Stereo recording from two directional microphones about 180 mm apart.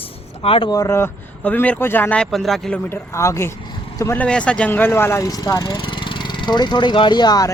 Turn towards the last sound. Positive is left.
turn(degrees=20)  # may be behind; listen again after turning